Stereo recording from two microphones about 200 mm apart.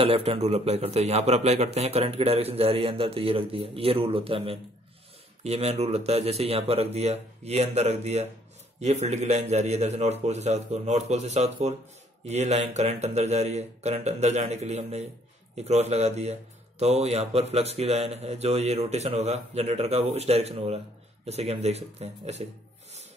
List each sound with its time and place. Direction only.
0.0 s a man's voice: 30° right (ahead or behind)